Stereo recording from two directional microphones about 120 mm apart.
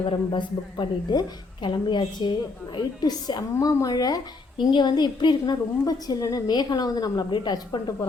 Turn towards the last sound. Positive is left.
turn(degrees=35)  # may be behind; listen again after turning